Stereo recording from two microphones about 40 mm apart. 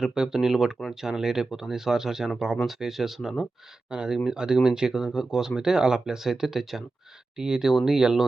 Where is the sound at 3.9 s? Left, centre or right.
Right.